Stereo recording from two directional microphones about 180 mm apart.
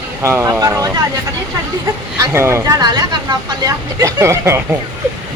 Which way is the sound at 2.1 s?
15° right (ahead or behind).